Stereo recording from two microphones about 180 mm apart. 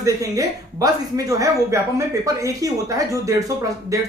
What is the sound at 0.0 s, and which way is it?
A woman's voice, 20° right (ahead or behind).